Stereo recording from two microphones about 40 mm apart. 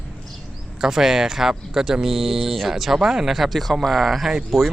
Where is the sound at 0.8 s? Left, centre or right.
Centre.